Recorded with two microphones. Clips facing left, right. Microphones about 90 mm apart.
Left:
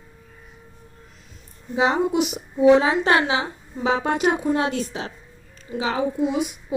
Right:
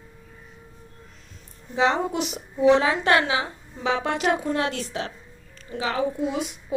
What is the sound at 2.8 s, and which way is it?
A woman's voice, 25° left (ahead or behind).